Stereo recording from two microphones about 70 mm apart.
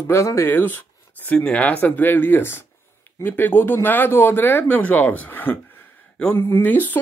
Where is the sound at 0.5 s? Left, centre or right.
Left.